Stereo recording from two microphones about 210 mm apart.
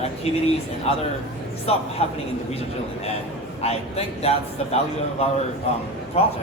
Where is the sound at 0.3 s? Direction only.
30° left (ahead or behind).